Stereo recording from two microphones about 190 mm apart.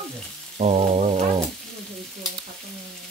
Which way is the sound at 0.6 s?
35° right (ahead or behind).